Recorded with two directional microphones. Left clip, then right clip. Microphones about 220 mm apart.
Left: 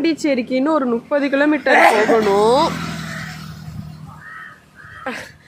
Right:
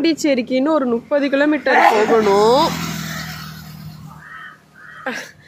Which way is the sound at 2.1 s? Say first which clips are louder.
Right 1 dB; 5° right (ahead or behind).